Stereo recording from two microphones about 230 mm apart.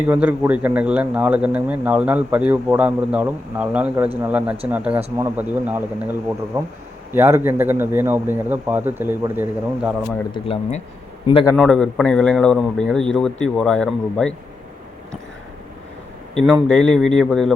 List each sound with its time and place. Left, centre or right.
0.1 s a man's voice: centre
10.3 s speech: left
11.5 s a man's voice: centre
16.3 s a man's voice: centre